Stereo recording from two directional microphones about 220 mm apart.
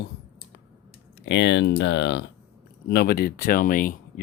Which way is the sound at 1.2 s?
55° left (ahead or behind).